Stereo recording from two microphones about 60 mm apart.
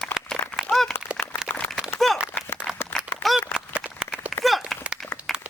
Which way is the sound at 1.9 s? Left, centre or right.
Centre.